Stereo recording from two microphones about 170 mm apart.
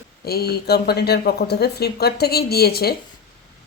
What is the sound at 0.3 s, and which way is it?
A woman's voice, 70° left (ahead or behind).